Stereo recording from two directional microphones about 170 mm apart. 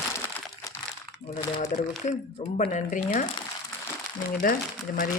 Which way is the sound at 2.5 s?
45° left (ahead or behind).